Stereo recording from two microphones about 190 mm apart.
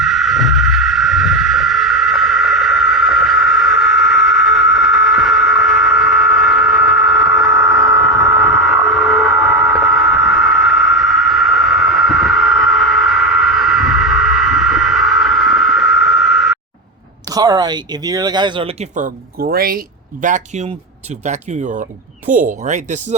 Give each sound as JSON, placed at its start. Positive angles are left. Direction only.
{"t": 0.0, "sound": "vehicle", "side_deg": 0}
{"t": 17.2, "sound": "speech", "side_deg": -20}
{"t": 20.2, "sound": "speech", "side_deg": -40}